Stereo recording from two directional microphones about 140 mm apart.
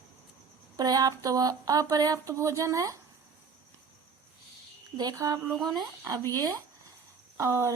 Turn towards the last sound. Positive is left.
turn(degrees=-20)  # may be behind; listen again after turning